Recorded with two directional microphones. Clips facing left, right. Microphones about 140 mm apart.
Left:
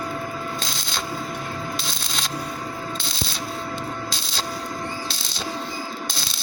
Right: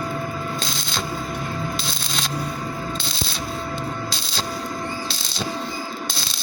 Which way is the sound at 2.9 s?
45° left (ahead or behind).